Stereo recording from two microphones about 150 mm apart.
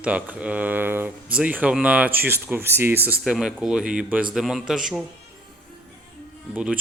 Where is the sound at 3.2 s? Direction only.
Centre (ahead or behind).